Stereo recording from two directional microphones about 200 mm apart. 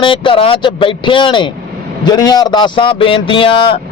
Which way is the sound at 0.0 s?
25° left (ahead or behind).